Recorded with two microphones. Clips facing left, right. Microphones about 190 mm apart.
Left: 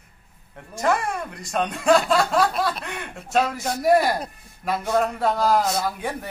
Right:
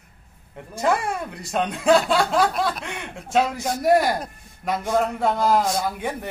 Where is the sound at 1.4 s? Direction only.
5° right (ahead or behind).